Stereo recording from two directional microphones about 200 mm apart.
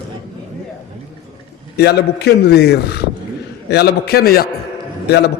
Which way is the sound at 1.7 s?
55° left (ahead or behind).